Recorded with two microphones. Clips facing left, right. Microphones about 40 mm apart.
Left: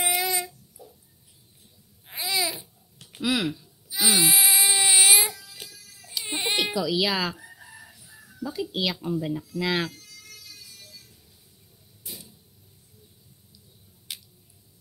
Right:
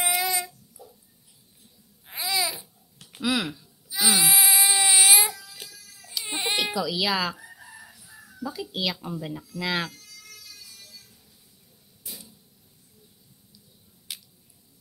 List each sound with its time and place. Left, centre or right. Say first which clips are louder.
0.0 s a sound: even; left
2.2 s babbling: even; centre
3.9 s baby cry: even; centre
5.7 s baby cry: even; left
6.2 s baby cry: left 1 dB; centre
6.5 s speech: left 2 dB; centre
7.3 s chicken: right 1 dB; centre
8.1 s chicken: left 1 dB; right
8.5 s speech: left 3 dB; centre
9.1 s speech: left 6 dB; centre
9.6 s speech: left 1 dB; centre
9.9 s music: even; left
12.0 s creak: left 1 dB; left